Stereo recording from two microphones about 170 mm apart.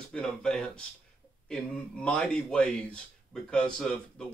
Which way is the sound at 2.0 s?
5° left (ahead or behind).